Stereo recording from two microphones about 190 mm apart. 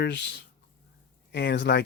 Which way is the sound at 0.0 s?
65° left (ahead or behind).